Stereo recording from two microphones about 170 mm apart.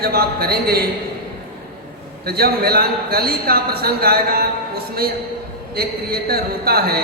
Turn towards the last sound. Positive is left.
turn(degrees=-65)  # may be behind; listen again after turning